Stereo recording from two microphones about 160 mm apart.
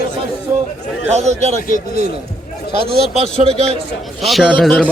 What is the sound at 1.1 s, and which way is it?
Speech, 45° right (ahead or behind).